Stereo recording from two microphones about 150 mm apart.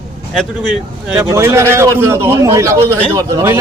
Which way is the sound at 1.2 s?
20° right (ahead or behind).